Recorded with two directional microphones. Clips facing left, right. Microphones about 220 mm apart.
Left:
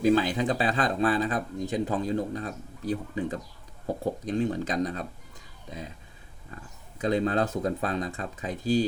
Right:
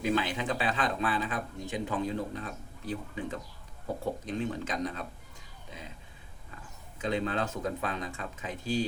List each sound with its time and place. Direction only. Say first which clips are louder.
0.0 s speech: left 7 dB; 35° left (ahead or behind)
7.0 s speech: left 6 dB; 40° left (ahead or behind)